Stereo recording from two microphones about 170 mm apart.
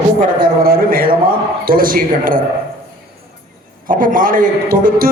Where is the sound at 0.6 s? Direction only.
60° right (ahead or behind).